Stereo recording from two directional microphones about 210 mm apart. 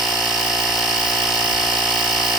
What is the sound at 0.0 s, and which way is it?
Engine, centre (ahead or behind).